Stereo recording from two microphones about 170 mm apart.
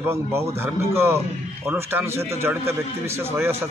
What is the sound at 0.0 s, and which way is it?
A man's voice, 15° right (ahead or behind).